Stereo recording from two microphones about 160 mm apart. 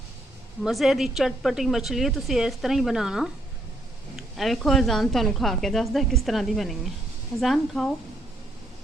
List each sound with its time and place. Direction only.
0.6 s a woman's voice: centre (ahead or behind)
4.4 s a woman's voice: centre (ahead or behind)